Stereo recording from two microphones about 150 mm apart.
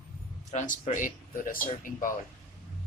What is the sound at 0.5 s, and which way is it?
Speech, 55° left (ahead or behind).